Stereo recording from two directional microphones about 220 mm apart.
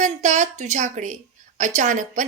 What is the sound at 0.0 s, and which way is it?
A woman's voice, 30° right (ahead or behind).